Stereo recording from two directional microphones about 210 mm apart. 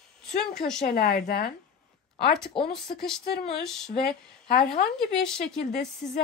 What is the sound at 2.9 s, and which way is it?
Speech, 40° left (ahead or behind).